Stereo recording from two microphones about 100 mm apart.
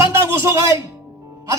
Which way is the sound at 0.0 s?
25° right (ahead or behind).